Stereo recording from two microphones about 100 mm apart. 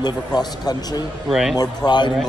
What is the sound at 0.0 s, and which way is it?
Speech, 45° left (ahead or behind).